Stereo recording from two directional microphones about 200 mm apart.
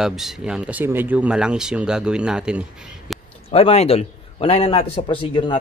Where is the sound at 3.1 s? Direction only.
Centre (ahead or behind).